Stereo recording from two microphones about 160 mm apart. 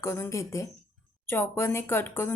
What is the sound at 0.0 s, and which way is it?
A woman's voice, 15° left (ahead or behind).